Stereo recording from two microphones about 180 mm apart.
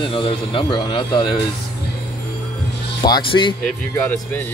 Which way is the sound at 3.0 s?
25° left (ahead or behind).